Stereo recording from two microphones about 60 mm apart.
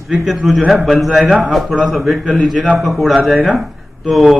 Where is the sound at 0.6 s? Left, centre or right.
Centre.